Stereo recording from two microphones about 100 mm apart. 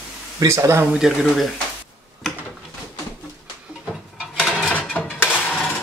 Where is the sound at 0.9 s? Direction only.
Centre (ahead or behind).